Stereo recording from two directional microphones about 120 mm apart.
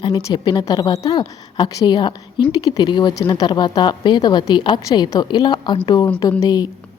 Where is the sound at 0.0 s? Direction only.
30° left (ahead or behind).